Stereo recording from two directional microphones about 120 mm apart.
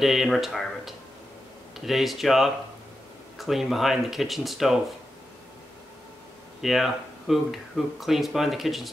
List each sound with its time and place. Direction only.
0.0 s speech: centre (ahead or behind)
6.6 s speech: centre (ahead or behind)